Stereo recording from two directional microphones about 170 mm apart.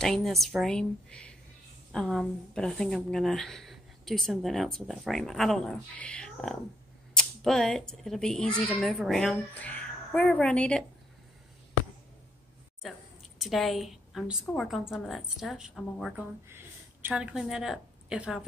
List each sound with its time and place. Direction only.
0.0 s speech: centre (ahead or behind)
12.8 s a woman's voice: centre (ahead or behind)
16.2 s speech: 15° right (ahead or behind)